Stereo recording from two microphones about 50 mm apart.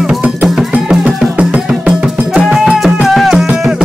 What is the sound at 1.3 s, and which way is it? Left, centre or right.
Music, right.